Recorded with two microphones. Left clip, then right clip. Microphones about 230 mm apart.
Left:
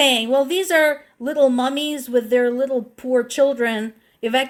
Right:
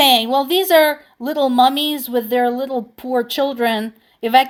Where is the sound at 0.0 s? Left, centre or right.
Right.